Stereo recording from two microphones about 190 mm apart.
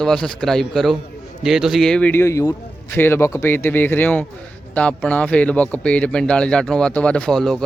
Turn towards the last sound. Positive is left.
turn(degrees=0)  # may be behind; listen again after turning